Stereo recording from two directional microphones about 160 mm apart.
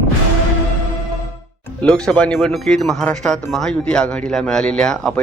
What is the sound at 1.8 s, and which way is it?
Speech, 5° left (ahead or behind).